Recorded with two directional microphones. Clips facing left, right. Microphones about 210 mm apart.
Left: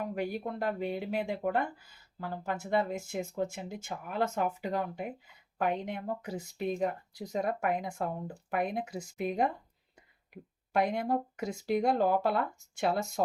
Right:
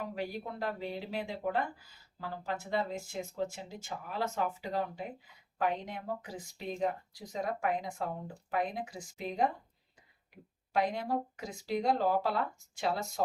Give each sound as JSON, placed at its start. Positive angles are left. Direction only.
{"t": 0.0, "sound": "speech", "side_deg": 55}
{"t": 10.7, "sound": "speech", "side_deg": 55}